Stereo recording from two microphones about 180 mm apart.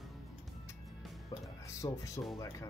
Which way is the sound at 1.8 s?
25° left (ahead or behind).